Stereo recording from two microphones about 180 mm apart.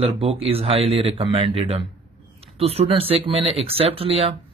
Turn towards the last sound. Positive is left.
turn(degrees=-35)  # may be behind; listen again after turning